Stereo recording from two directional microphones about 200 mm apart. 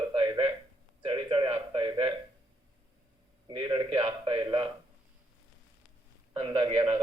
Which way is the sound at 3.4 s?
25° right (ahead or behind).